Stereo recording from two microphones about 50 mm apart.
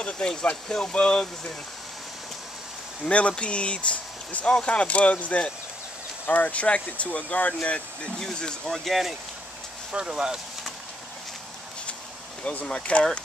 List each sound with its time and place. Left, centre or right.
0.7 s speech: centre
3.1 s speech: left
8.6 s speech: centre
9.9 s speech: centre
12.4 s speech: left